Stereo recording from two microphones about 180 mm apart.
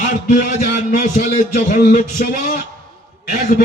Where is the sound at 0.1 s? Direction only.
45° left (ahead or behind).